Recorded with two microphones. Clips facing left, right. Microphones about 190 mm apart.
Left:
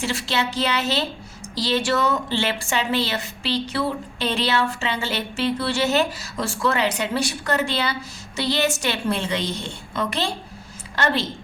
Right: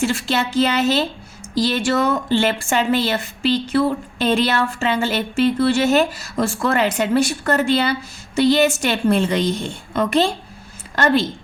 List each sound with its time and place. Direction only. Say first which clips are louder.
0.0 s a woman's voice: right 5 dB; 50° right (ahead or behind)